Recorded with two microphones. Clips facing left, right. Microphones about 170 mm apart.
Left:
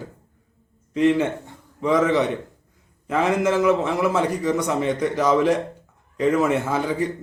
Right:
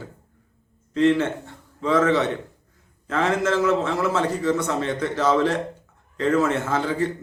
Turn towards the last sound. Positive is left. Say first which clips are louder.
# even
turn(degrees=15)  # may be behind; listen again after turning